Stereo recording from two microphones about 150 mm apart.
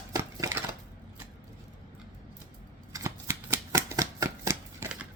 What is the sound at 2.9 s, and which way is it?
Shuffling cards, 20° right (ahead or behind).